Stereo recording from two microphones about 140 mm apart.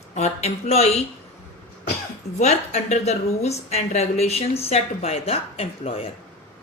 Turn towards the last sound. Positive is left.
turn(degrees=45)  # may be behind; listen again after turning